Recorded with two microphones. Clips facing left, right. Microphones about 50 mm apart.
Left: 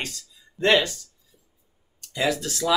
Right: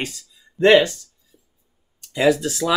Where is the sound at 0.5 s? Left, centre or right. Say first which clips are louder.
Right 7 dB; right.